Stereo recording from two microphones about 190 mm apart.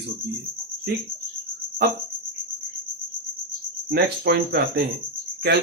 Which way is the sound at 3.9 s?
60° right (ahead or behind).